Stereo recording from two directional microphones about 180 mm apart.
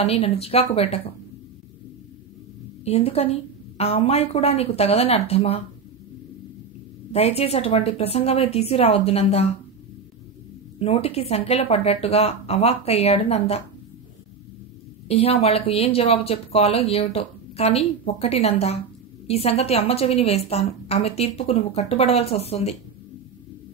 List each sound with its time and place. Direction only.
0.0 s a woman's voice: 35° left (ahead or behind)
2.8 s a woman's voice: 35° left (ahead or behind)
7.1 s a woman's voice: 35° left (ahead or behind)
10.8 s a woman's voice: 35° left (ahead or behind)
15.0 s a woman's voice: 30° left (ahead or behind)